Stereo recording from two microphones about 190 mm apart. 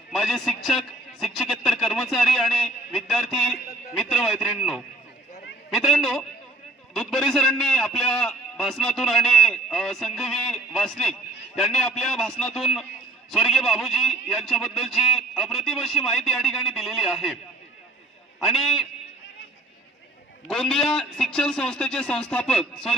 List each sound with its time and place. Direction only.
0.1 s a man's voice: centre (ahead or behind)
18.4 s a man's voice: centre (ahead or behind)
20.4 s a man's voice: 5° left (ahead or behind)